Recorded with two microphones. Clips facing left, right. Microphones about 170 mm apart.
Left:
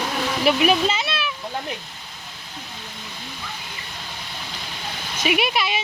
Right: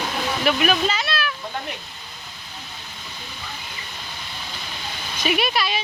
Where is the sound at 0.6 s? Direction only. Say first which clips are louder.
Left 2 dB; 25° left (ahead or behind).